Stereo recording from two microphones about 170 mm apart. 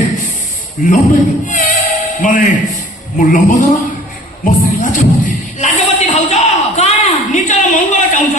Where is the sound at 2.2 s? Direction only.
50° left (ahead or behind).